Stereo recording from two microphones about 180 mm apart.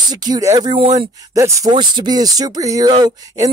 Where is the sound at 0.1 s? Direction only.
20° right (ahead or behind).